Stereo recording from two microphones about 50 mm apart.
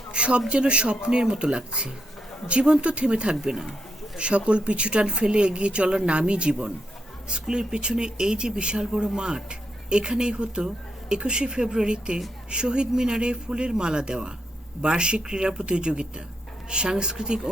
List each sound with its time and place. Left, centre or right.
0.1 s speech: right